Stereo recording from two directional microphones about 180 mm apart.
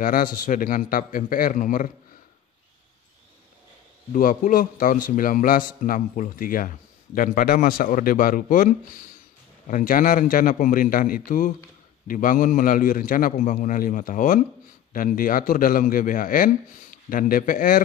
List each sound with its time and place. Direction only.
0.0 s a man's voice: 50° left (ahead or behind)
4.1 s a man's voice: 50° left (ahead or behind)